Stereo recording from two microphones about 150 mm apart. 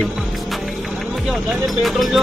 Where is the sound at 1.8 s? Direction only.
Centre (ahead or behind).